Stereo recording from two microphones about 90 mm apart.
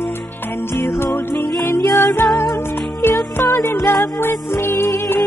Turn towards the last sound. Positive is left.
turn(degrees=30)  # may be behind; listen again after turning